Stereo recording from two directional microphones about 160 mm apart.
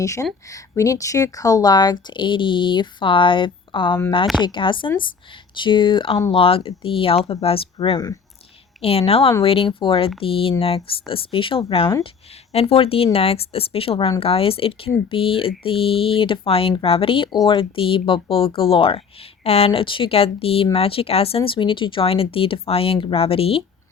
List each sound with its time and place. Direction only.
0.0 s speech: 20° left (ahead or behind); by 23.6 s 35° left (ahead or behind)